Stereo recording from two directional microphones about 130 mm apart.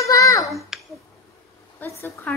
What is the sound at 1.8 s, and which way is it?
Speech, 15° left (ahead or behind).